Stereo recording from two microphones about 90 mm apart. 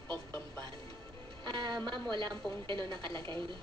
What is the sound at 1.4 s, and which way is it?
A woman's voice, 60° right (ahead or behind).